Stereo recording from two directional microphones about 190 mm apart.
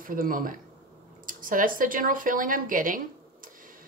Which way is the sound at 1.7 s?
45° right (ahead or behind).